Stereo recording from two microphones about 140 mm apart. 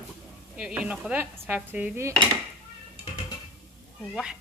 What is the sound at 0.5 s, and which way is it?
A woman's voice, 10° right (ahead or behind).